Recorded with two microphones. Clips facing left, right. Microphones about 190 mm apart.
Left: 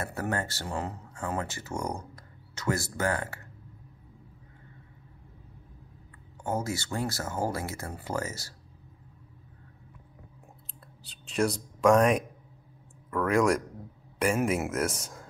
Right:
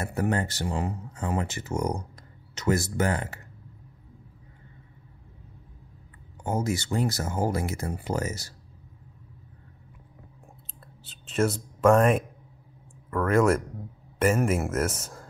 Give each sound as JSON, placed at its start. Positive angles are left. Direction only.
{"t": 0.0, "sound": "speech", "side_deg": -20}
{"t": 6.4, "sound": "speech", "side_deg": -20}
{"t": 11.1, "sound": "a man's voice", "side_deg": 0}